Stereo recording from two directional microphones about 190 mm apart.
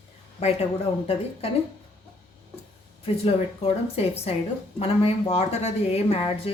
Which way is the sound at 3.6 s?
30° left (ahead or behind).